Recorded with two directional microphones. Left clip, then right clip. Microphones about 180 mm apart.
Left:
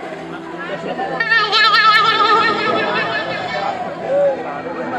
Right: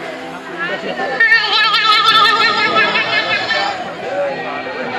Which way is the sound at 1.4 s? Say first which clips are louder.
Left 1 dB; 35° right (ahead or behind).